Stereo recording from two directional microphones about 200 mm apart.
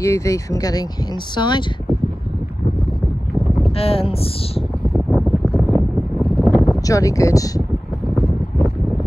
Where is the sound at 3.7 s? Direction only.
30° left (ahead or behind).